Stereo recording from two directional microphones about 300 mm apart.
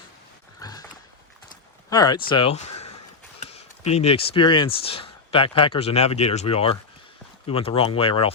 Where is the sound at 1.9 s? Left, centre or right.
Centre.